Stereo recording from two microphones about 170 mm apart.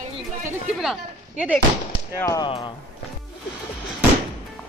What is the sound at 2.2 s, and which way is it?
Speech, 20° left (ahead or behind).